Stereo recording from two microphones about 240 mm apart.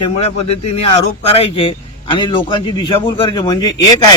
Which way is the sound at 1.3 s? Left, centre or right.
Left.